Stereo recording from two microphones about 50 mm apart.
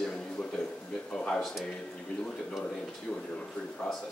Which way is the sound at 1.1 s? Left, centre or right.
Centre.